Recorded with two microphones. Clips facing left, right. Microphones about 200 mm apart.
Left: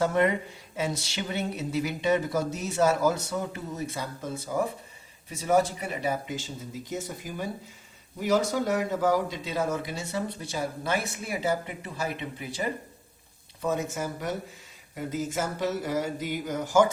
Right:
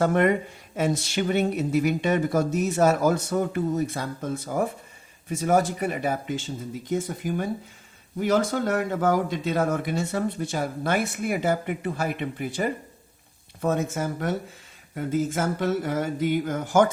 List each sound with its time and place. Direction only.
0.0 s speech: 55° right (ahead or behind)